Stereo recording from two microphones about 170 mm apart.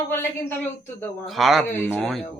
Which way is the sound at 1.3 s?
Centre (ahead or behind).